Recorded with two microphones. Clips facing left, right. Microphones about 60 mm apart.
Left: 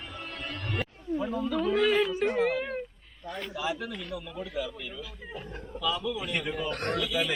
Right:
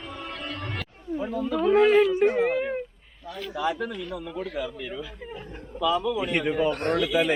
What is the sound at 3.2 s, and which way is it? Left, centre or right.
Speech, centre.